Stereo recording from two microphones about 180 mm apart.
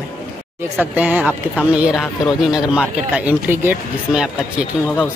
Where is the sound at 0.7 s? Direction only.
10° right (ahead or behind).